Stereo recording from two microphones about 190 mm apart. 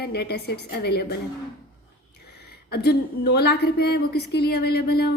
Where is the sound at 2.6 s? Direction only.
55° left (ahead or behind).